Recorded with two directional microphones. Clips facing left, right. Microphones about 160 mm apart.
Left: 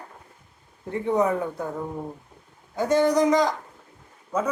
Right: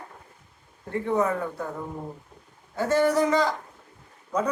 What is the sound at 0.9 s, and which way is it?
Speech, 20° left (ahead or behind).